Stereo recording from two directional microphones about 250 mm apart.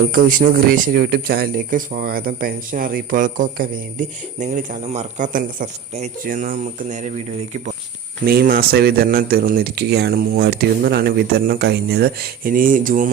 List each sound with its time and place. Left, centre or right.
0.1 s speech: right
8.2 s speech: right